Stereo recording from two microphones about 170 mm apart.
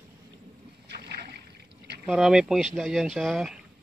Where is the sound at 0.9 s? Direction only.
70° right (ahead or behind).